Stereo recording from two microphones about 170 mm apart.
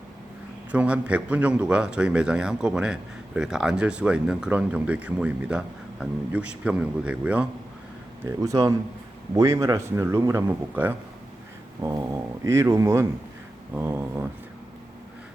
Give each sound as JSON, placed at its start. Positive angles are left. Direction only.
{"t": 0.7, "sound": "a man's voice", "side_deg": -5}
{"t": 8.2, "sound": "speech", "side_deg": -20}